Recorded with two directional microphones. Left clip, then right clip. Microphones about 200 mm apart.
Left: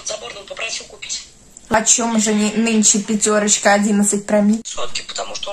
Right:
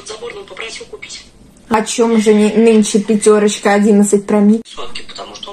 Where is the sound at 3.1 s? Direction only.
15° left (ahead or behind).